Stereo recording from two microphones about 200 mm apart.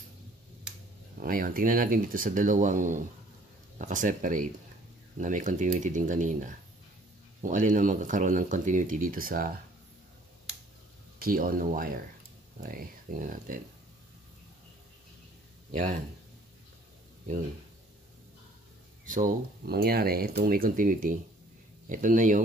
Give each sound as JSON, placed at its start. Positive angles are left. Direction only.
{"t": 1.2, "sound": "speech", "side_deg": -45}
{"t": 11.1, "sound": "speech", "side_deg": -45}
{"t": 15.7, "sound": "speech", "side_deg": -40}
{"t": 19.0, "sound": "speech", "side_deg": -40}